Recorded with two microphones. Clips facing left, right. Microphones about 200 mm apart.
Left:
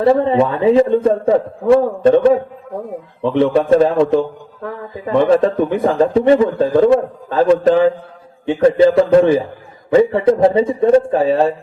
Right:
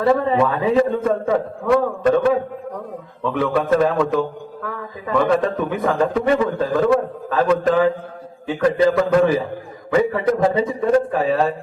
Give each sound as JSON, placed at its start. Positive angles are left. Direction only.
{"t": 0.0, "sound": "a man's voice", "side_deg": 25}